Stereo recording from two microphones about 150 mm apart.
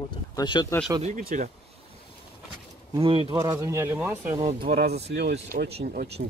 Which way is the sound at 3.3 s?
20° right (ahead or behind).